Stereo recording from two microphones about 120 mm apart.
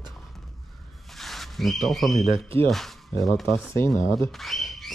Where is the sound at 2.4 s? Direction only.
50° right (ahead or behind).